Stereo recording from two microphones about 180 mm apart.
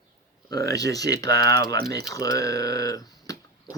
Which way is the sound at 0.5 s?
20° left (ahead or behind).